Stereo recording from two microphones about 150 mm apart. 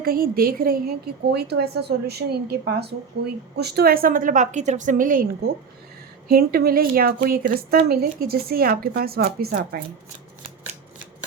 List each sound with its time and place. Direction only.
0.0 s a woman's voice: 75° right (ahead or behind)
6.3 s a woman's voice: 90° right